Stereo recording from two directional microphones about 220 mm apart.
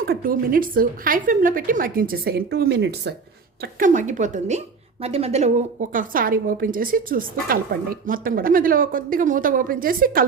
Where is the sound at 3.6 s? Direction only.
35° right (ahead or behind).